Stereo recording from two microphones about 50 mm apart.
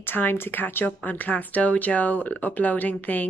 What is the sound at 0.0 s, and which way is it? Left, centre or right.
Speech, left.